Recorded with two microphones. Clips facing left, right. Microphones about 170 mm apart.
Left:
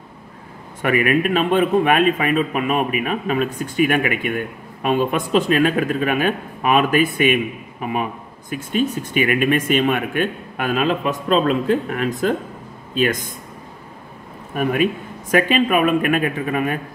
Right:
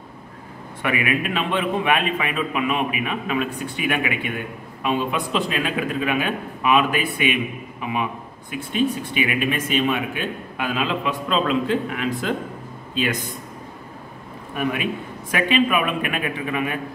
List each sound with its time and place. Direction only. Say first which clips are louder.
0.8 s speech: left 6 dB; 45° left (ahead or behind)
14.5 s speech: left 5 dB; 45° left (ahead or behind)